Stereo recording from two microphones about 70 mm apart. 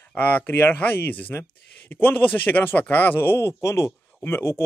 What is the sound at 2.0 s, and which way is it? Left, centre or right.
A man's voice, left.